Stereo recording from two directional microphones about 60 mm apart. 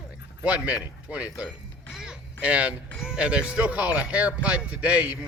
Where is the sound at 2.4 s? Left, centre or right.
Right.